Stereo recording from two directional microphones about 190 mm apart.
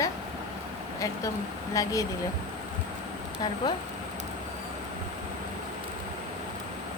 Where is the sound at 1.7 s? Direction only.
20° left (ahead or behind).